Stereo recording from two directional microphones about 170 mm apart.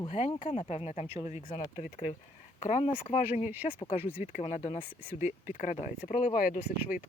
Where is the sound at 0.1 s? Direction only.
35° left (ahead or behind).